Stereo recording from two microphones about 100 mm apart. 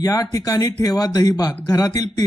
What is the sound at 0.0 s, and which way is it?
Speech, 35° left (ahead or behind).